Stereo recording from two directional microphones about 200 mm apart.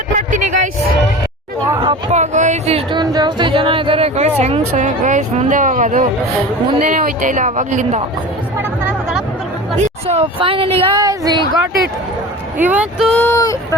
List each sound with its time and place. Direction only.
0.2 s a sound: 40° right (ahead or behind)
1.8 s speech: 30° right (ahead or behind)
8.5 s chatter: 5° right (ahead or behind)
9.8 s speech: 30° right (ahead or behind)
12.5 s speech: 10° right (ahead or behind)
13.1 s speech: 10° left (ahead or behind)